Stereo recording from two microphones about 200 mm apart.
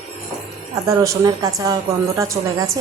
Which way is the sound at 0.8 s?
15° right (ahead or behind).